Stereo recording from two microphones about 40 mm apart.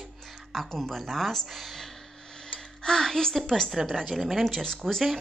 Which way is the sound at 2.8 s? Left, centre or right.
Centre.